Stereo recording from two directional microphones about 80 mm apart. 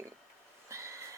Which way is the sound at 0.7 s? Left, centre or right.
Right.